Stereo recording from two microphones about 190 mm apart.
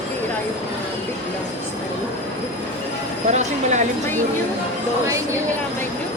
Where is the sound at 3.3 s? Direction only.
35° right (ahead or behind).